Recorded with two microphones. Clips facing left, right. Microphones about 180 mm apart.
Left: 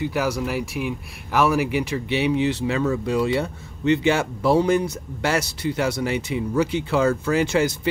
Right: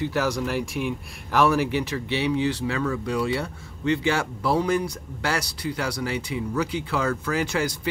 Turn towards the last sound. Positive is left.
turn(degrees=25)  # may be behind; listen again after turning